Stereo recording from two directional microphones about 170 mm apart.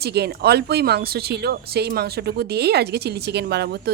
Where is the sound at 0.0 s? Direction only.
75° right (ahead or behind).